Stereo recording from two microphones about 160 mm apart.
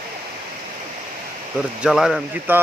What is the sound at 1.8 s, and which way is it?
Speech, centre (ahead or behind).